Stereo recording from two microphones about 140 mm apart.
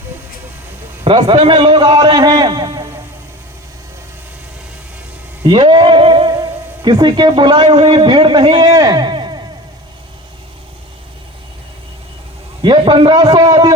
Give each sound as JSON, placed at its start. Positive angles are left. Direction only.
{"t": 1.0, "sound": "a man's voice", "side_deg": -35}
{"t": 5.5, "sound": "speech", "side_deg": -35}
{"t": 12.6, "sound": "a man's voice", "side_deg": -35}